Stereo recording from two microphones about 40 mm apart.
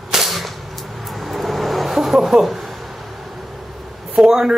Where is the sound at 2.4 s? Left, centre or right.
Centre.